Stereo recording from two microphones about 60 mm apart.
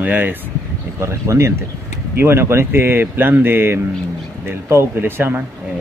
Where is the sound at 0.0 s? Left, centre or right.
Right.